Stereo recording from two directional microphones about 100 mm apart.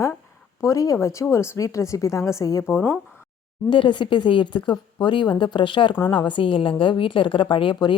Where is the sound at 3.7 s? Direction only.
55° left (ahead or behind).